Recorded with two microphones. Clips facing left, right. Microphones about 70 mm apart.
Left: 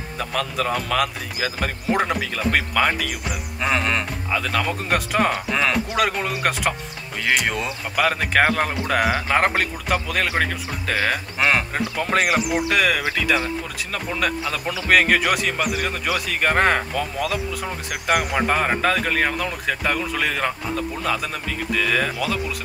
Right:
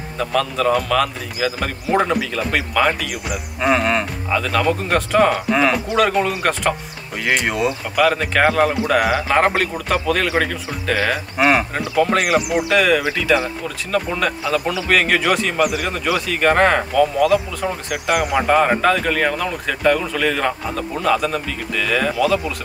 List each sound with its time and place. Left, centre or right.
0.2 s speech: centre
5.5 s speech: centre
5.9 s speech: centre
7.2 s speech: centre
11.0 s speech: centre
12.2 s speech: centre
14.2 s speech: centre